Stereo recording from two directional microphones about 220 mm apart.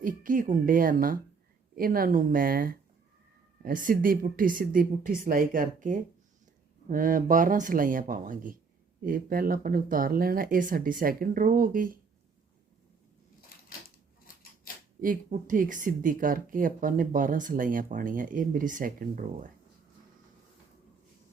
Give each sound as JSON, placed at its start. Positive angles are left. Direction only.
{"t": 0.0, "sound": "speech", "side_deg": -40}
{"t": 13.5, "sound": "a sound", "side_deg": 40}
{"t": 15.0, "sound": "speech", "side_deg": -40}